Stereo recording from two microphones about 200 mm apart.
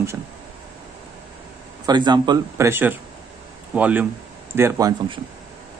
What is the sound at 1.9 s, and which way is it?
Speech, 20° right (ahead or behind).